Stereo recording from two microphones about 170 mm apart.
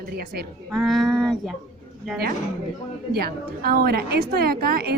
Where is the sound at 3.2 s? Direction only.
60° right (ahead or behind).